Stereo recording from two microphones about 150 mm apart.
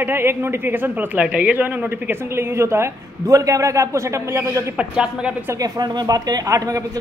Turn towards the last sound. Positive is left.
turn(degrees=-25)  # may be behind; listen again after turning